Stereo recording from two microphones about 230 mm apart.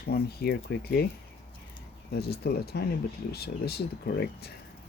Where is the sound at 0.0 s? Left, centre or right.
Left.